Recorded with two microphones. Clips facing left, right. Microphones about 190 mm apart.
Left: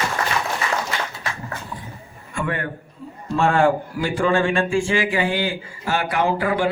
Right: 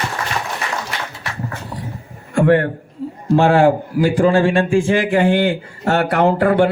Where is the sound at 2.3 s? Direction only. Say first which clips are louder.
Right 12 dB; 60° right (ahead or behind).